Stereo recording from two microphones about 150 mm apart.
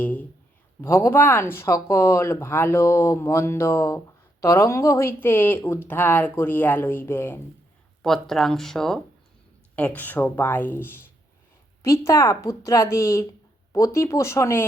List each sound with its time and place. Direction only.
0.0 s a man's voice: 10° left (ahead or behind)
8.0 s a woman's voice: centre (ahead or behind)